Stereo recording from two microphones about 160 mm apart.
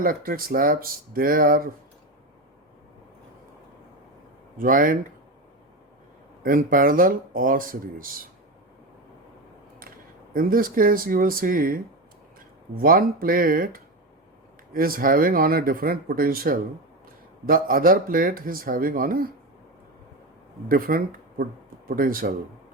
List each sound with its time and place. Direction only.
0.0 s speech: 65° right (ahead or behind)
4.5 s speech: 60° right (ahead or behind)
6.4 s speech: 60° right (ahead or behind)
10.3 s speech: 65° right (ahead or behind)
20.7 s speech: 65° right (ahead or behind)